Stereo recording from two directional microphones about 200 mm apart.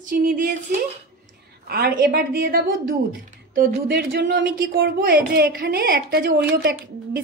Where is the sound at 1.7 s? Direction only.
50° right (ahead or behind).